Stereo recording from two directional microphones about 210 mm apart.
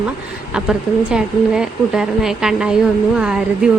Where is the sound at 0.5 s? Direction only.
5° right (ahead or behind).